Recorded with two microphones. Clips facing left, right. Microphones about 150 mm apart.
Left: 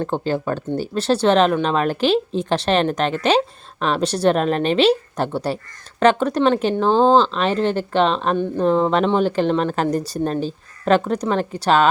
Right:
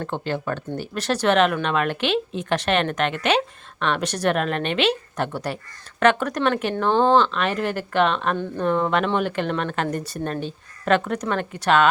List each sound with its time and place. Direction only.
0.0 s speech: 35° left (ahead or behind)